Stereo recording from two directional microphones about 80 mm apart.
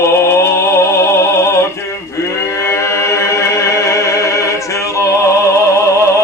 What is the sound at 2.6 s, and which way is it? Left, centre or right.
Music, left.